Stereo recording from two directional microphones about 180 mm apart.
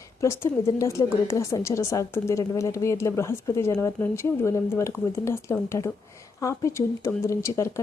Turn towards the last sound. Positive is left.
turn(degrees=15)  # may be behind; listen again after turning